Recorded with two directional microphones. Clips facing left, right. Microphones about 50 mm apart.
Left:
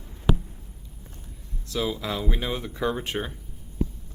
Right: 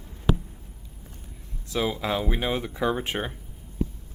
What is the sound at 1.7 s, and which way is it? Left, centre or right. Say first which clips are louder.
Speech: right 2 dB; centre.